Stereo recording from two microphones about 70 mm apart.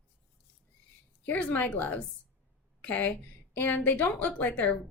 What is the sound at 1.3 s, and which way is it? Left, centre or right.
Speech, left.